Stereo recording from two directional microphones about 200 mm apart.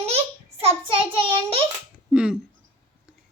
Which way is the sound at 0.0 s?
30° right (ahead or behind).